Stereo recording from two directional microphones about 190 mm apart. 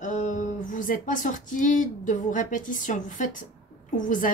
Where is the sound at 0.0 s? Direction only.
40° left (ahead or behind).